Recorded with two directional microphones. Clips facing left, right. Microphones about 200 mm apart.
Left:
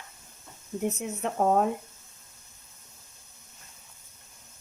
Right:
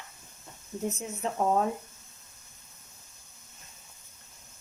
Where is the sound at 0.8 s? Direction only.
65° left (ahead or behind).